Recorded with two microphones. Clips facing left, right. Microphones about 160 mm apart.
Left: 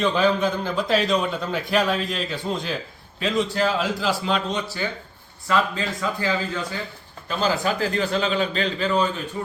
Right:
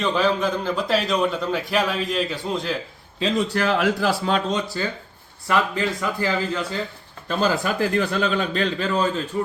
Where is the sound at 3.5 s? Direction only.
65° right (ahead or behind).